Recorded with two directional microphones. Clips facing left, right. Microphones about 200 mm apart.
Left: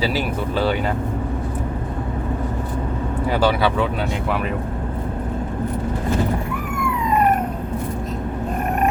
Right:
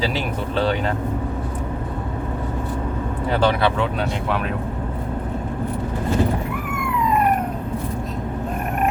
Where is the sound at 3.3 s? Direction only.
10° left (ahead or behind).